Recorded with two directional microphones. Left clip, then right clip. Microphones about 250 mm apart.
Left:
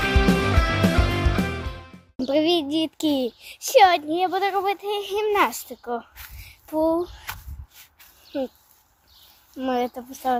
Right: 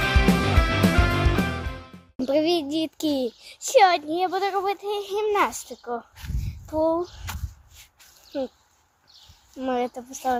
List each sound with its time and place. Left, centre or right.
0.0 s music: centre
6.7 s a sound: centre
8.3 s speech: centre
9.6 s speech: centre